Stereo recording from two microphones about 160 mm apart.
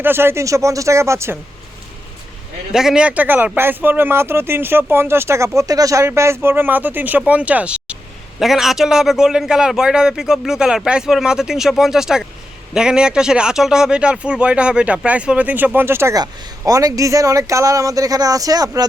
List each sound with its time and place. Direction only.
0.0 s speech: 15° right (ahead or behind)
2.7 s a man's voice: 5° right (ahead or behind); by 18.9 s 25° right (ahead or behind)